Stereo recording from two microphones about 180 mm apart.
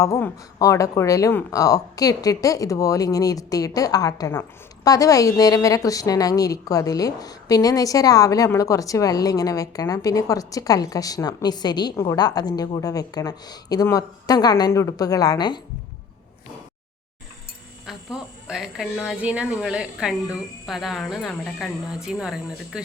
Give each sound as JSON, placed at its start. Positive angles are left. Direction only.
{"t": 0.0, "sound": "speech", "side_deg": 15}
{"t": 17.8, "sound": "speech", "side_deg": -5}